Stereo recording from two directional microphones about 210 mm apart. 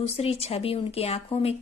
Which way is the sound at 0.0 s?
30° left (ahead or behind).